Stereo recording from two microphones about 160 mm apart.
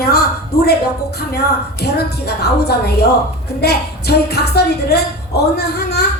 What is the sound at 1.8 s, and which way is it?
A woman's voice, 85° left.